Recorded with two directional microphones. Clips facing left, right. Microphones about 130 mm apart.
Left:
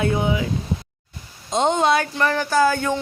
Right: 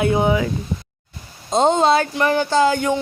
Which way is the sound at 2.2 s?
20° right (ahead or behind).